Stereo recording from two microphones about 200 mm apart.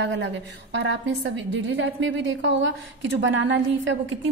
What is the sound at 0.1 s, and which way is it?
A woman's voice, 60° right (ahead or behind).